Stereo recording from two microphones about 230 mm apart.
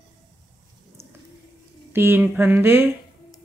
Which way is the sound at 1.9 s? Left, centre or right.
Centre.